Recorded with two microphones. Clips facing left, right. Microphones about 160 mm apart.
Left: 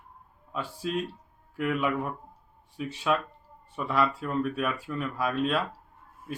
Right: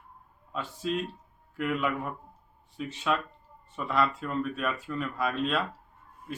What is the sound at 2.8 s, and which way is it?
Speech, 10° left (ahead or behind).